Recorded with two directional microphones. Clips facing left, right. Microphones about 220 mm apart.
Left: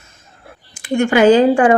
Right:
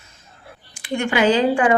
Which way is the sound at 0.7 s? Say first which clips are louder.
Left 7 dB; 45° left (ahead or behind).